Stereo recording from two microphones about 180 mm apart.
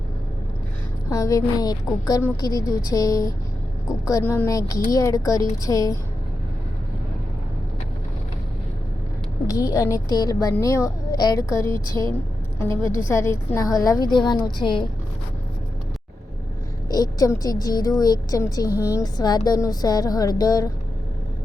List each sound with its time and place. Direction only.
1.1 s a woman's voice: 20° left (ahead or behind)
9.5 s a woman's voice: 20° left (ahead or behind)
16.9 s a woman's voice: 20° left (ahead or behind)